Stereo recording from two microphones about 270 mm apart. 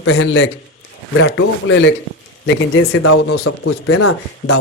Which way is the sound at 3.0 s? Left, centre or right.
Left.